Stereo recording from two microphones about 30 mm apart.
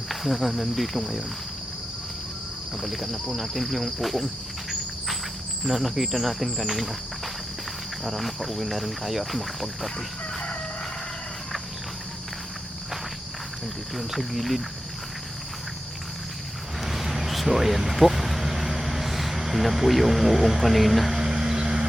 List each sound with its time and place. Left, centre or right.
0.1 s speech: centre
2.8 s speech: centre
5.6 s speech: centre
8.0 s speech: centre
13.9 s speech: centre
16.8 s a sound: centre
21.2 s a sound: centre